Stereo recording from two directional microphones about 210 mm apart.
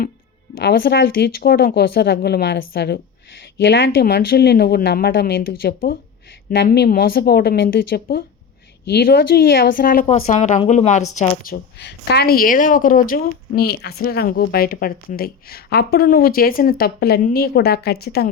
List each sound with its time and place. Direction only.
0.6 s a woman's voice: 50° left (ahead or behind)